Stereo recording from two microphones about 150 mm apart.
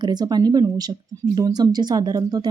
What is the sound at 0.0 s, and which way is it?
Speech, 30° right (ahead or behind).